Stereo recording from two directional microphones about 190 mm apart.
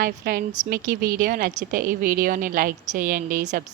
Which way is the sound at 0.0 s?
50° right (ahead or behind).